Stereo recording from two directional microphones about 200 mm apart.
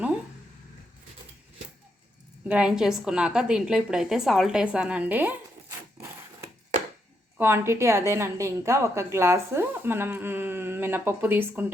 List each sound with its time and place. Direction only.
2.5 s a woman's voice: 5° right (ahead or behind)